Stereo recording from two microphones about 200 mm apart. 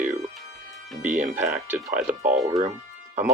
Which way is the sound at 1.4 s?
10° right (ahead or behind).